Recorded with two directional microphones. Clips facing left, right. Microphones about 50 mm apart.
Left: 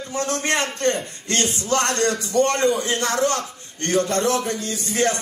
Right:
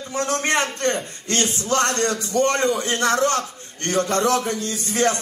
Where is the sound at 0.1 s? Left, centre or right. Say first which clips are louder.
Right 2 dB; right.